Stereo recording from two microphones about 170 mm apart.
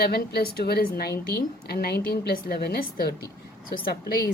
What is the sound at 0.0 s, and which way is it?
A woman's voice, 70° left (ahead or behind).